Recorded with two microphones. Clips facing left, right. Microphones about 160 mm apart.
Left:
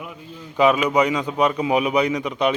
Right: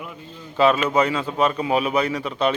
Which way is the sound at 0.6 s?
10° left (ahead or behind).